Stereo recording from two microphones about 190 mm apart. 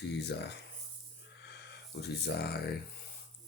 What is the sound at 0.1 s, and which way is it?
Speech, 60° left (ahead or behind).